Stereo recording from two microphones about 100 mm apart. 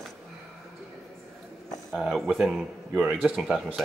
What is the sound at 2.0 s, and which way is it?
A man's voice, centre (ahead or behind).